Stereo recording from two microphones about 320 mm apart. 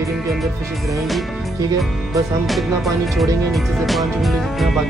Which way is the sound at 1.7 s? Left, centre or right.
Centre.